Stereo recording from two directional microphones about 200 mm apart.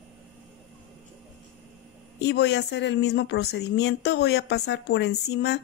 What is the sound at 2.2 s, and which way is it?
A woman's voice, 60° left (ahead or behind).